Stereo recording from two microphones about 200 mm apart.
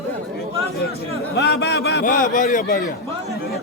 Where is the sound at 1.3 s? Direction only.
55° left (ahead or behind).